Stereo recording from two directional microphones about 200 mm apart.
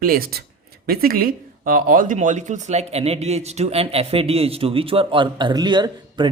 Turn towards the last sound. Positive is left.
turn(degrees=-20)  # may be behind; listen again after turning